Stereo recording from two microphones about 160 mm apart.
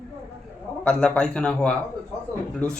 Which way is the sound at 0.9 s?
5° left (ahead or behind).